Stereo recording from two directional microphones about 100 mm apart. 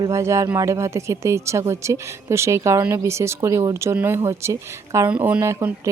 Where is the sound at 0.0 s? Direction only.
30° right (ahead or behind).